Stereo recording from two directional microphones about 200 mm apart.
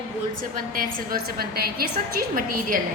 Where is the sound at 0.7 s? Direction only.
45° right (ahead or behind).